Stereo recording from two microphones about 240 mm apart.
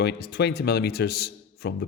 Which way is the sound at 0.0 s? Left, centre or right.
Left.